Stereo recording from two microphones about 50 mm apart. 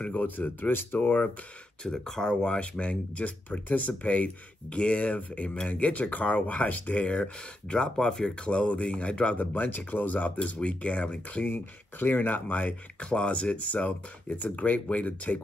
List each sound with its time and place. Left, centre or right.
0.0 s speech: left
1.8 s speech: centre
9.4 s speech: left
11.5 s speech: left